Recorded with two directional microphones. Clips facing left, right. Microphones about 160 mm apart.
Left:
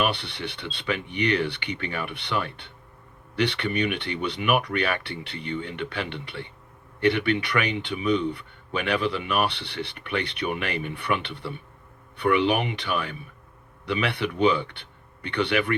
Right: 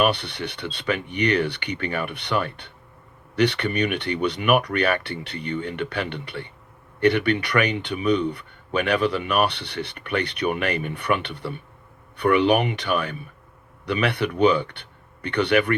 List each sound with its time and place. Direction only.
0.0 s speech: 45° right (ahead or behind)